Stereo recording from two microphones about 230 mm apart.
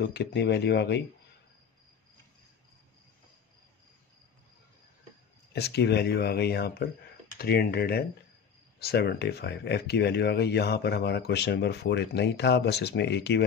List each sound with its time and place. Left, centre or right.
0.0 s speech: left
5.5 s speech: left